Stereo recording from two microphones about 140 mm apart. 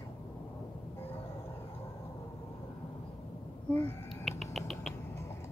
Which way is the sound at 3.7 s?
15° left (ahead or behind).